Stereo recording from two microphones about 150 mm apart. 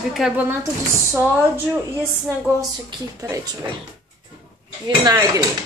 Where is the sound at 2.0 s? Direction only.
15° right (ahead or behind).